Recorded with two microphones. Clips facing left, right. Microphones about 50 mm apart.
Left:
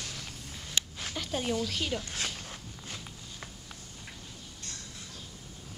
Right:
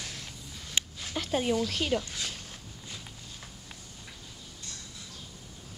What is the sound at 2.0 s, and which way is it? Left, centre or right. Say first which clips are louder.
Speech: left 2 dB; left.